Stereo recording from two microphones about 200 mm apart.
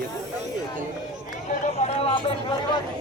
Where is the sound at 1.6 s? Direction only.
30° left (ahead or behind).